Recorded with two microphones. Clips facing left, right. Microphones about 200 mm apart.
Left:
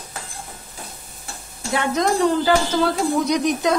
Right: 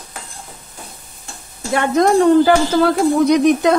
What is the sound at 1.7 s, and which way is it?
Speech, 55° right (ahead or behind).